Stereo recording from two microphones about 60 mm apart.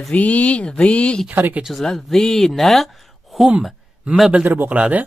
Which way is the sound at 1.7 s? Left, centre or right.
Centre.